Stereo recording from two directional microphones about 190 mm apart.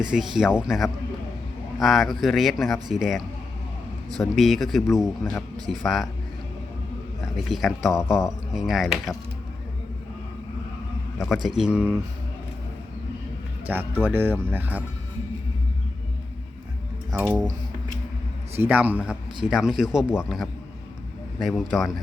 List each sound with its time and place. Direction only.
0.0 s speech: 5° right (ahead or behind)
7.3 s speech: centre (ahead or behind)
11.4 s speech: 5° right (ahead or behind)
13.7 s speech: 10° right (ahead or behind)
17.1 s speech: 15° right (ahead or behind)
18.5 s speech: 10° right (ahead or behind)